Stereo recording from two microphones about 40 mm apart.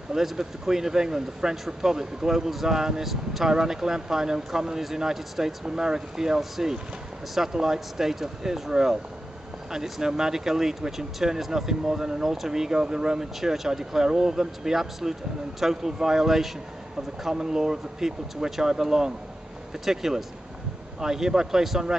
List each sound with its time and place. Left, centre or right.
0.1 s speech: centre